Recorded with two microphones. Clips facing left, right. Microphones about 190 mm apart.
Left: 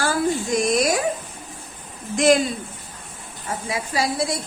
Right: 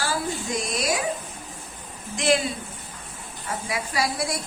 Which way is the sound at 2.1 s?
45° left (ahead or behind).